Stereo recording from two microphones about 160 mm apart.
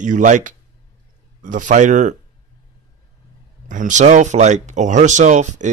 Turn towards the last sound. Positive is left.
turn(degrees=-50)  # may be behind; listen again after turning